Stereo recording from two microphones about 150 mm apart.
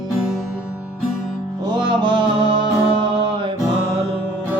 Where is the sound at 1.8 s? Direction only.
30° right (ahead or behind).